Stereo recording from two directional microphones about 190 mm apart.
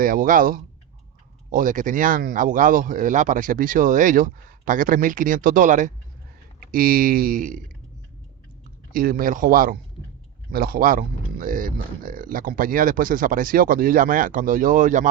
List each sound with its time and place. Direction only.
0.0 s speech: 45° right (ahead or behind)
8.9 s speech: 50° right (ahead or behind)